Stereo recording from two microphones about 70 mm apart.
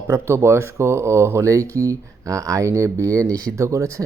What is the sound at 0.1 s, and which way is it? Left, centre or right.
Speech, right.